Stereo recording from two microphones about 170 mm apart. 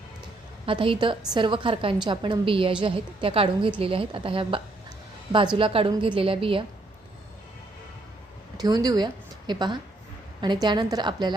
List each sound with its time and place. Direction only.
0.6 s a woman's voice: 30° right (ahead or behind)
8.6 s a woman's voice: 20° right (ahead or behind)